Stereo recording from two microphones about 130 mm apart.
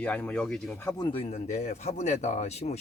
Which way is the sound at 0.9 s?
40° left (ahead or behind).